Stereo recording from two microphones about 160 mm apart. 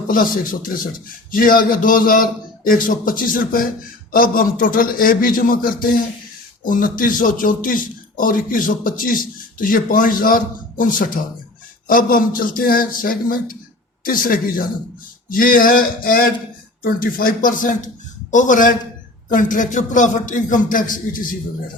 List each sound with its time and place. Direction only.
1.3 s a man's voice: 60° left (ahead or behind)